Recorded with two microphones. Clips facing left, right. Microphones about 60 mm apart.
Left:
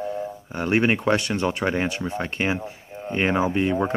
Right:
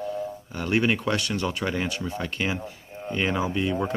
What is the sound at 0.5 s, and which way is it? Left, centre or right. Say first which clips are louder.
Speech: left 3 dB; left.